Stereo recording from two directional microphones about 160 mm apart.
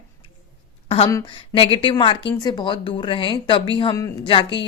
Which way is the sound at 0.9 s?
35° left (ahead or behind).